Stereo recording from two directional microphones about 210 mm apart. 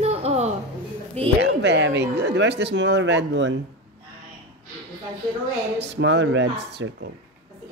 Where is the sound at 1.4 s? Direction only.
55° right (ahead or behind).